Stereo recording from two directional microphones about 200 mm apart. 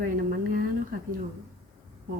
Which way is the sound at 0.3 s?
45° right (ahead or behind).